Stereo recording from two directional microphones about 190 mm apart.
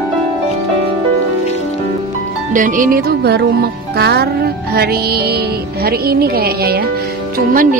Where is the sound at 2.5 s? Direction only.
45° right (ahead or behind).